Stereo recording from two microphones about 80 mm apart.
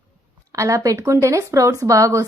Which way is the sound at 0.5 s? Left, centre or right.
Right.